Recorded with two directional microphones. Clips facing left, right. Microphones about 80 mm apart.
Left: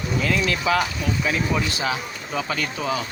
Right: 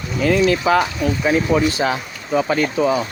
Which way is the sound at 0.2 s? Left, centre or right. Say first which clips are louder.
Right 9 dB; right.